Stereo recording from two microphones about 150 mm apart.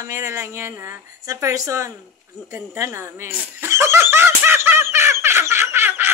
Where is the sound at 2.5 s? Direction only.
15° right (ahead or behind).